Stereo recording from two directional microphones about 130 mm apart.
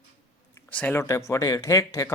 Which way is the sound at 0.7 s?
10° left (ahead or behind).